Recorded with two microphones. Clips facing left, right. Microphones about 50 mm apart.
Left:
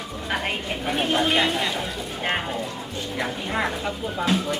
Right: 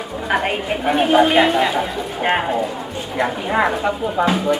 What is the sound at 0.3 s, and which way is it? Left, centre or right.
Speech, centre.